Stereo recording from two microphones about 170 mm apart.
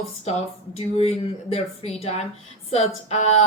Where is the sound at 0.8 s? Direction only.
35° left (ahead or behind).